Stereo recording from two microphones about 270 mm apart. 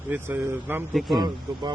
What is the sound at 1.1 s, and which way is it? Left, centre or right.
Speech, centre.